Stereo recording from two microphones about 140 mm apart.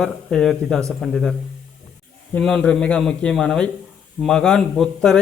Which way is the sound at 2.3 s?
5° left (ahead or behind).